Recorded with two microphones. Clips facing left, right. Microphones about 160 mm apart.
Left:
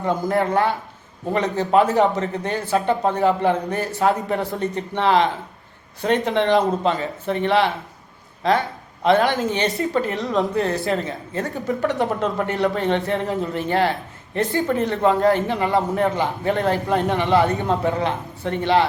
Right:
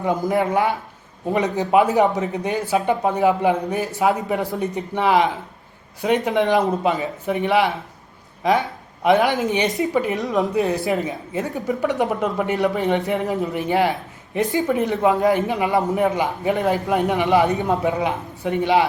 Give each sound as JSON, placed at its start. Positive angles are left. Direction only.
{"t": 0.3, "sound": "speech", "side_deg": -10}